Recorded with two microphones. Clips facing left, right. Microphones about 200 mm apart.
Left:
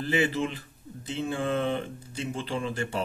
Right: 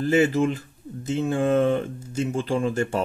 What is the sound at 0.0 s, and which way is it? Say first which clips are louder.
Speech: right 7 dB; 45° right (ahead or behind).